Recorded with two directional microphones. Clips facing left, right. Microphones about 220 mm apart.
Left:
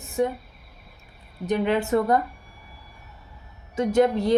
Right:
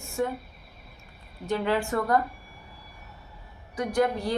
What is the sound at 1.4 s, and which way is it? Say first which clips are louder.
Speech: left 4 dB; 20° left (ahead or behind).